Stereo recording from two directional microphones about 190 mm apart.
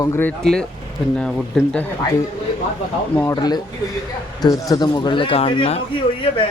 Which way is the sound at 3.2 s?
20° left (ahead or behind).